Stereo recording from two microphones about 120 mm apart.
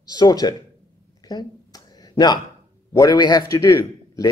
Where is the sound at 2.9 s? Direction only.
30° left (ahead or behind).